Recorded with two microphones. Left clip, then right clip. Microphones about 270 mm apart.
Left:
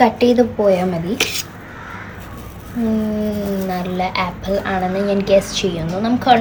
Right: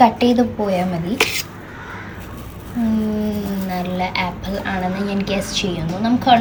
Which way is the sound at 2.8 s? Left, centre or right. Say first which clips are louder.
Left 2 dB; centre.